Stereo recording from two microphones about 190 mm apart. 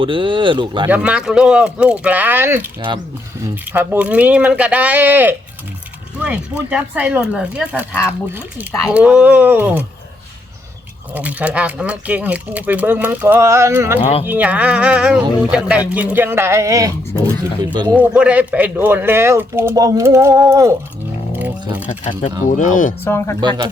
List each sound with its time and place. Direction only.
0.0 s speech: 25° right (ahead or behind)
0.9 s speech: 5° right (ahead or behind)
6.7 s speech: 5° right (ahead or behind)
11.1 s speech: 10° right (ahead or behind)
14.0 s speech: 30° left (ahead or behind)
14.3 s speech: 10° right (ahead or behind)
21.8 s speech: 40° left (ahead or behind)
23.0 s speech: 15° left (ahead or behind)
23.4 s speech: 20° right (ahead or behind)